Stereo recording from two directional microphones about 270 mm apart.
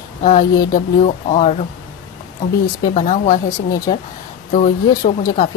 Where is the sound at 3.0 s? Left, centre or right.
Left.